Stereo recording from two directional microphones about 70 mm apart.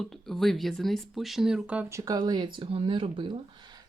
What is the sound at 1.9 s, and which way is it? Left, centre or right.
Speech, right.